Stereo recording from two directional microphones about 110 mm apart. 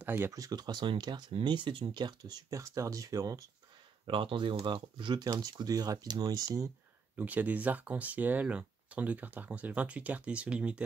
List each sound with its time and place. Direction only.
0.0 s speech: 20° right (ahead or behind)
0.3 s speech: 35° right (ahead or behind)
4.0 s speech: 50° right (ahead or behind); by 6.7 s 35° right (ahead or behind)
7.2 s speech: 15° right (ahead or behind)